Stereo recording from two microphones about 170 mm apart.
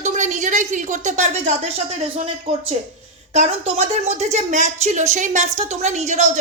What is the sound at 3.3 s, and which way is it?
A woman's voice, 40° right (ahead or behind).